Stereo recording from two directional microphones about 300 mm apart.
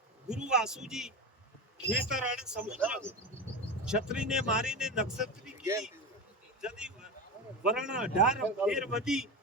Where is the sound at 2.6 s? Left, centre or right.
Right.